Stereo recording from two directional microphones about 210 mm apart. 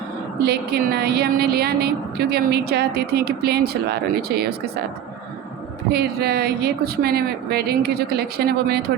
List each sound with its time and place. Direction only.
0.4 s a woman's voice: 50° right (ahead or behind)
5.9 s a woman's voice: 50° right (ahead or behind)